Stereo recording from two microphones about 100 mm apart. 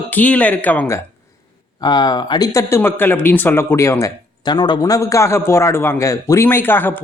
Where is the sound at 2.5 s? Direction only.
25° left (ahead or behind).